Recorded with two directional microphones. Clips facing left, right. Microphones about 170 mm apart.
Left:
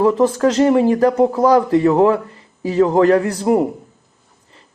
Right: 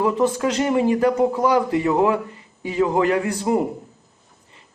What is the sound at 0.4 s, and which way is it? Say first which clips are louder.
Speech: left 9 dB; 35° left (ahead or behind).